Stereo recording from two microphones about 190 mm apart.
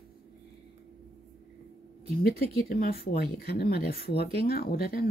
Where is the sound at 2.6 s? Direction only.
55° left (ahead or behind).